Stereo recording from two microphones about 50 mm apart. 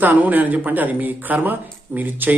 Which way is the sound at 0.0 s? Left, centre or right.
Right.